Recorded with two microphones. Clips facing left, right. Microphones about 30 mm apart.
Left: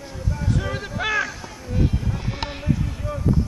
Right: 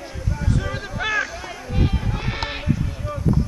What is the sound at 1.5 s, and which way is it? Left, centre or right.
Run, right.